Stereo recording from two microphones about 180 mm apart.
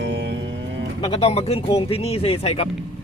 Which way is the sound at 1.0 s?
35° left (ahead or behind).